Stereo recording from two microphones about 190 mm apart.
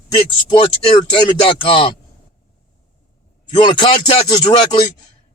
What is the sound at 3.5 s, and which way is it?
Speech, 25° left (ahead or behind).